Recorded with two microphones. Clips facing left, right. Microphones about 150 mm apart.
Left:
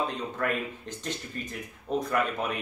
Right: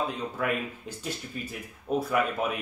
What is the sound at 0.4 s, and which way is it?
Speech, 10° right (ahead or behind).